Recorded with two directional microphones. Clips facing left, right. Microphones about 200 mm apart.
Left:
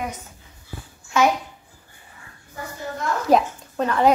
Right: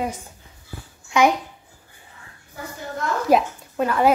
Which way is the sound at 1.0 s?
15° right (ahead or behind).